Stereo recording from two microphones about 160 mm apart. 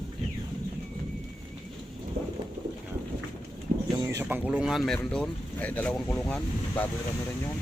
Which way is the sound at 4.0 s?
20° right (ahead or behind).